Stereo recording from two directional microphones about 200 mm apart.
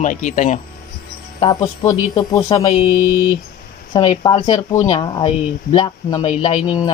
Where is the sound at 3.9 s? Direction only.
25° left (ahead or behind).